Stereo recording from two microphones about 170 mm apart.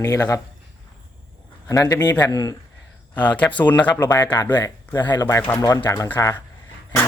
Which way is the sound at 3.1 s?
10° left (ahead or behind).